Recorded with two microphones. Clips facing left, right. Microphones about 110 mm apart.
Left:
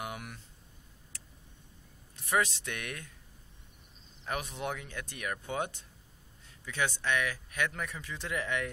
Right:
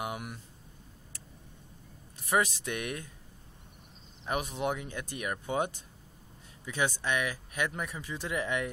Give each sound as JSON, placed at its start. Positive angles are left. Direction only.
{"t": 0.0, "sound": "a sound", "side_deg": -15}
{"t": 2.1, "sound": "speech", "side_deg": -15}
{"t": 4.3, "sound": "speech", "side_deg": -15}